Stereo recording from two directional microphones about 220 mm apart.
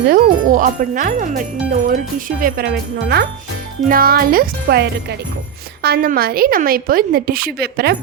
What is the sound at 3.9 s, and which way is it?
A woman's voice, 40° right (ahead or behind).